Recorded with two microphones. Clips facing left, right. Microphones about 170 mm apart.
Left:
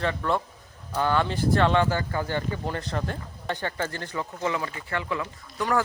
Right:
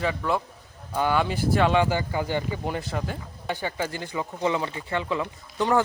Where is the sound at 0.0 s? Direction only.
5° right (ahead or behind).